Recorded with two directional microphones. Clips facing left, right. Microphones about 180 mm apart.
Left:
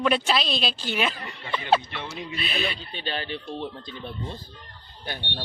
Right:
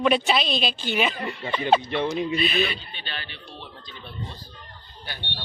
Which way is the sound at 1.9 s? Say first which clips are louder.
Right 11 dB; 20° right (ahead or behind).